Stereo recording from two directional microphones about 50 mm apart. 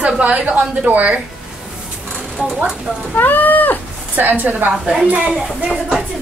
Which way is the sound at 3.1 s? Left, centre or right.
Left.